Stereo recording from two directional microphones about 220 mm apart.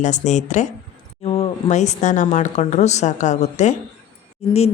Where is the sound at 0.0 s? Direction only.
35° left (ahead or behind).